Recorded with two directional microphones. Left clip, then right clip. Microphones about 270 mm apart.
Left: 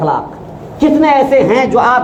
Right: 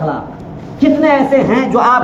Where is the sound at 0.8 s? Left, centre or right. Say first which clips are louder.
Left 2 dB; left.